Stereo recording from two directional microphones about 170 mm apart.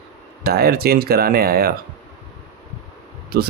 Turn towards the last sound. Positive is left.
turn(degrees=-60)  # may be behind; listen again after turning